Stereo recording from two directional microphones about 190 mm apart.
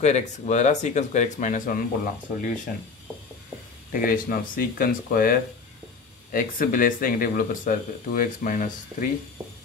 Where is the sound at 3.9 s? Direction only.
45° left (ahead or behind).